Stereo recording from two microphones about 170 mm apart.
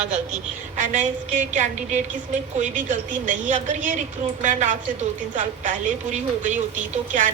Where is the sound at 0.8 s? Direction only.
50° right (ahead or behind).